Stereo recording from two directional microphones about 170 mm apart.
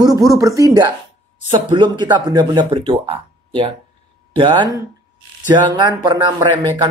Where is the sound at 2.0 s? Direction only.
25° right (ahead or behind).